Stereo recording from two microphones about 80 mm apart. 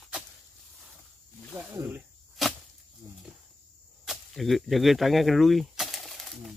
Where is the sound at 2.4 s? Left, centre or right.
Centre.